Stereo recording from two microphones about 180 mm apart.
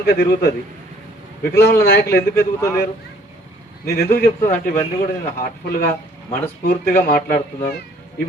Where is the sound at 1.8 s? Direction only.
60° left (ahead or behind).